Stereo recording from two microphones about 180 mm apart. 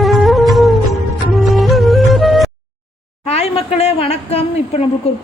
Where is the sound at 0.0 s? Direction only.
Centre (ahead or behind).